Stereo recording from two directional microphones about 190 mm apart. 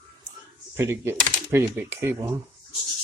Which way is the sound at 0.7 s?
15° right (ahead or behind).